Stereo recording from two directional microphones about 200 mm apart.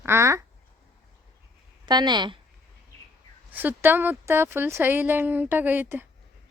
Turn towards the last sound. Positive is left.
turn(degrees=-10)  # may be behind; listen again after turning